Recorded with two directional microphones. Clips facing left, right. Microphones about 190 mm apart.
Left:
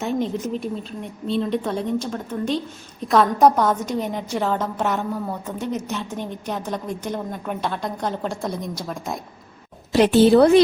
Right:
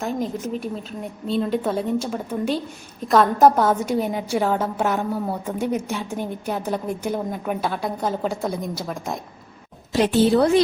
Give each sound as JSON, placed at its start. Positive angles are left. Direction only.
{"t": 0.0, "sound": "a woman's voice", "side_deg": 0}
{"t": 9.9, "sound": "a woman's voice", "side_deg": 70}